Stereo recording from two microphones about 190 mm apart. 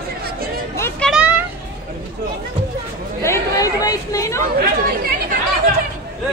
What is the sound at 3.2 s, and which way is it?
Chatter, 15° left (ahead or behind).